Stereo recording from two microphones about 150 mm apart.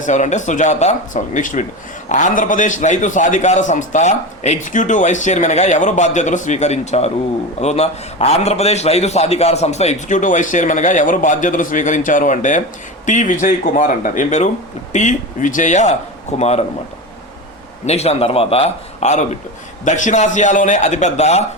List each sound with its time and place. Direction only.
0.0 s a man's voice: 55° left (ahead or behind)
17.8 s a man's voice: 45° left (ahead or behind)